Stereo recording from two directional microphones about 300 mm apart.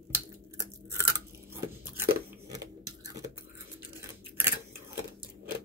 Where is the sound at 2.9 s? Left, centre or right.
Centre.